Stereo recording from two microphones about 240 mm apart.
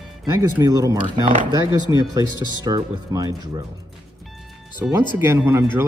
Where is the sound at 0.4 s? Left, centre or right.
Centre.